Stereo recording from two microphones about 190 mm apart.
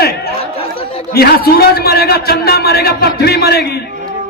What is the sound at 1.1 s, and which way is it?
A man's voice, 55° left (ahead or behind).